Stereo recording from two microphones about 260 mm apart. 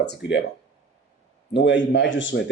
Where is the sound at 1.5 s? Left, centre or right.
Left.